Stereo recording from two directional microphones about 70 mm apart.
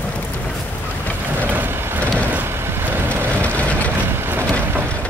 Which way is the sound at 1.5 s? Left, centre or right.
Right.